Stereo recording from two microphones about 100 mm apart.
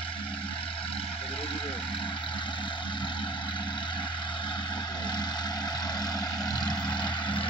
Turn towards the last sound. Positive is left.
turn(degrees=50)  # may be behind; listen again after turning